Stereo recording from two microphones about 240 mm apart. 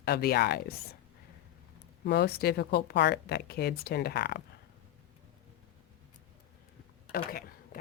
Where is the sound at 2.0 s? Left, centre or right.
Left.